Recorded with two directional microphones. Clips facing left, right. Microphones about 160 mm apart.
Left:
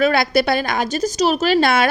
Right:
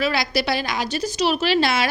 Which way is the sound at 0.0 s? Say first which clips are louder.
Left 6 dB; 55° left (ahead or behind).